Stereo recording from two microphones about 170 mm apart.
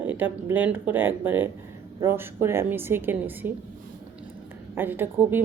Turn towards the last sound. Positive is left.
turn(degrees=-10)  # may be behind; listen again after turning